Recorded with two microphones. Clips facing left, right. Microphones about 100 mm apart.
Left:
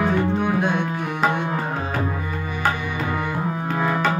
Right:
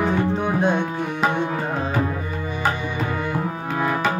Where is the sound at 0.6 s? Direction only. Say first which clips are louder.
Right 2 dB; 25° right (ahead or behind).